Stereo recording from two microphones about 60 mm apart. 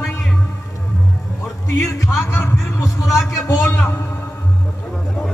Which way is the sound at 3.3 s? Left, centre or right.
Left.